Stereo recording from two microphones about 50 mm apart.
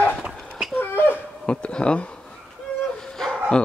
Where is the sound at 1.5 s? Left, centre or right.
Centre.